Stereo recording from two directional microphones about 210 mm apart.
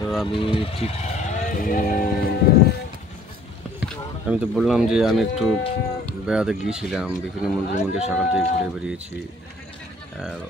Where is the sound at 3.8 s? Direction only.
5° right (ahead or behind).